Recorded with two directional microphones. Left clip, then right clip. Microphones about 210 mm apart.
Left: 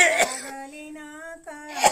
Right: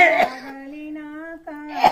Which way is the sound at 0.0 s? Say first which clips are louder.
Right 4 dB; 35° left (ahead or behind).